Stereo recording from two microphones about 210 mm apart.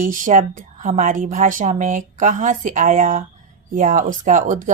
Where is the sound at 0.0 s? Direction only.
40° right (ahead or behind).